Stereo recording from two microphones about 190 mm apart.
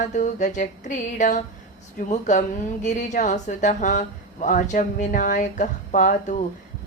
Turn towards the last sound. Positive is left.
turn(degrees=40)  # may be behind; listen again after turning